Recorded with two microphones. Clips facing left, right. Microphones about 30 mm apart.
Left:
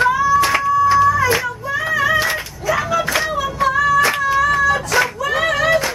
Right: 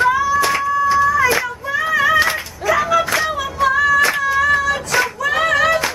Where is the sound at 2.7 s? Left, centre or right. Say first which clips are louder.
Right 3 dB; centre.